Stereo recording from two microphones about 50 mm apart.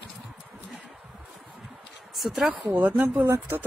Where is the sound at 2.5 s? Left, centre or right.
Right.